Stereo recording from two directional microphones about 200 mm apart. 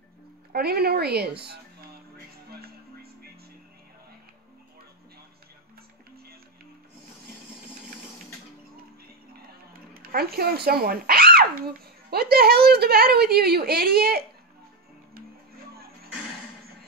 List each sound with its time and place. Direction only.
0.5 s speech: 50° right (ahead or behind)
2.5 s music: 50° right (ahead or behind)
10.1 s speech: 50° right (ahead or behind)